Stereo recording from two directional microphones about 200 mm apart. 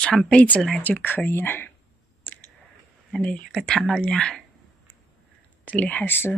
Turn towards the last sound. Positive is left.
turn(degrees=10)  # may be behind; listen again after turning